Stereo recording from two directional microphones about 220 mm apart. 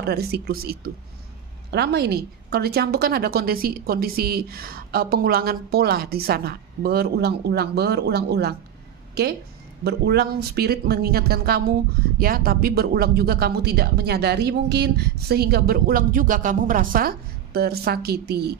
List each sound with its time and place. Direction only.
0.0 s a woman's voice: 45° right (ahead or behind)
9.8 s a woman's voice: 45° right (ahead or behind)